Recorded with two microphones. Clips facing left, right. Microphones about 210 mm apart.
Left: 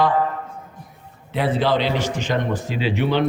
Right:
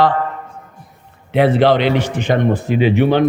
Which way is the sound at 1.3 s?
65° right (ahead or behind).